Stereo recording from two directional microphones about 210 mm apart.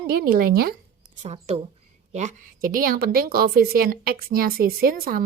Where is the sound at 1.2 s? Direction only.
30° right (ahead or behind).